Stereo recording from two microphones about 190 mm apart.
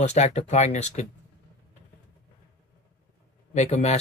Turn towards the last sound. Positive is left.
turn(degrees=35)  # may be behind; listen again after turning